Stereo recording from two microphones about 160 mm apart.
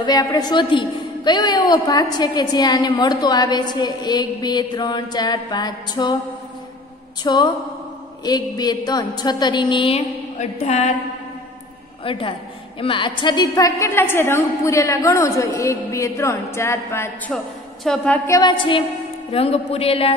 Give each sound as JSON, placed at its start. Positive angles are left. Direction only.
{"t": 0.0, "sound": "a woman's voice", "side_deg": 25}
{"t": 7.2, "sound": "a woman's voice", "side_deg": 25}
{"t": 12.0, "sound": "a woman's voice", "side_deg": 35}
{"t": 18.3, "sound": "a woman's voice", "side_deg": 30}